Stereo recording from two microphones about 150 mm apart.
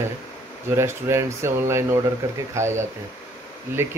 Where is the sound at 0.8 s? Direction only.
20° right (ahead or behind).